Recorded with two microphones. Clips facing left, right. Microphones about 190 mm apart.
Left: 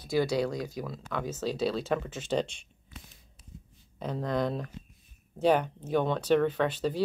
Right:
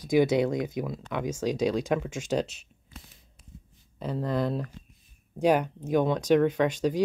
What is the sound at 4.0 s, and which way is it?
Speech, 5° right (ahead or behind).